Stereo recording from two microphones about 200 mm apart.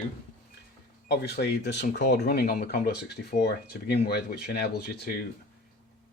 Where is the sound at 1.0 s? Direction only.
55° left (ahead or behind).